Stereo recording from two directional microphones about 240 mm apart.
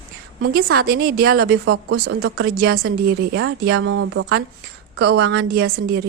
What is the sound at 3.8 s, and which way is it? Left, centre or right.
Speech, right.